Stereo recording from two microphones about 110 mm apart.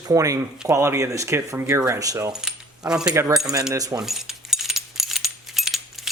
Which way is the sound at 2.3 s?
5° right (ahead or behind).